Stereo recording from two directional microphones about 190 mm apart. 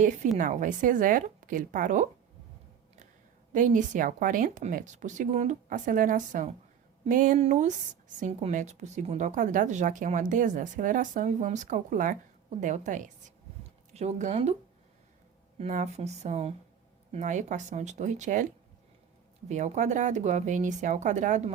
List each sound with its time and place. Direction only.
0.3 s speech: 45° right (ahead or behind)
3.5 s a woman's voice: 40° right (ahead or behind)
15.5 s a woman's voice: 35° right (ahead or behind)
19.5 s a woman's voice: 40° right (ahead or behind)